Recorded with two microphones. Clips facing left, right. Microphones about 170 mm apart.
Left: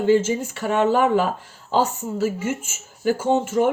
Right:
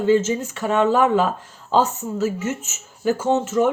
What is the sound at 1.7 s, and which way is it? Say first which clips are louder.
Speech: right 1 dB; 10° left (ahead or behind).